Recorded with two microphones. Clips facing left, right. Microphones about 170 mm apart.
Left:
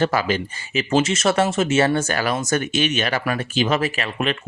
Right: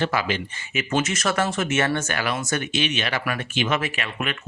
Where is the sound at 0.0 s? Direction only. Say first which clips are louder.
Left 4 dB; 40° left (ahead or behind).